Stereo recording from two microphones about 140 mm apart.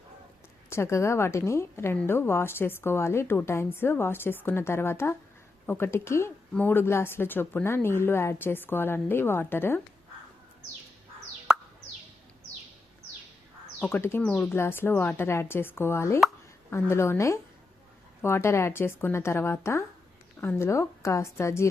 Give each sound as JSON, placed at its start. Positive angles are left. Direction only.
{"t": 0.7, "sound": "a woman's voice", "side_deg": 20}
{"t": 13.8, "sound": "a woman's voice", "side_deg": 15}